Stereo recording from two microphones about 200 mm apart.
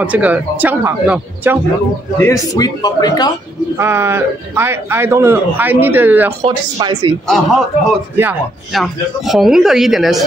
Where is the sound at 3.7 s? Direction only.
10° right (ahead or behind).